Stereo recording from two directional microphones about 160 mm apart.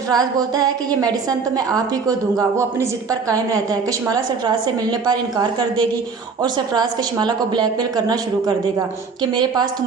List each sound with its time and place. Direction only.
0.1 s a woman's voice: 25° right (ahead or behind)